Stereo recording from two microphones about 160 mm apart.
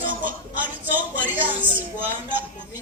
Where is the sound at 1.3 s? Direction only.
10° right (ahead or behind).